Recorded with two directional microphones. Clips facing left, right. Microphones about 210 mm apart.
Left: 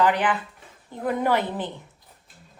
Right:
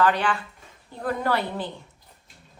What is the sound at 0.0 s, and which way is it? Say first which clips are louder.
A woman's voice: left 1 dB; 15° left (ahead or behind).